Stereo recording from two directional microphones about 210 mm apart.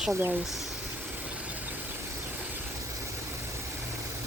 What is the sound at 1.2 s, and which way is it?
Vehicle, 5° right (ahead or behind).